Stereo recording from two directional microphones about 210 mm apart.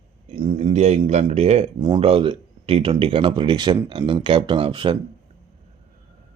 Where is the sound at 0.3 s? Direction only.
25° right (ahead or behind).